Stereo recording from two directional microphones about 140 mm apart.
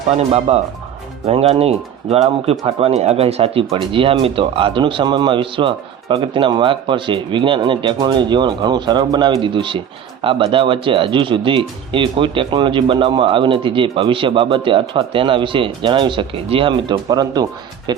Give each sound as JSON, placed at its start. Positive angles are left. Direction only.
{"t": 0.2, "sound": "speech", "side_deg": -50}
{"t": 17.1, "sound": "speech", "side_deg": -30}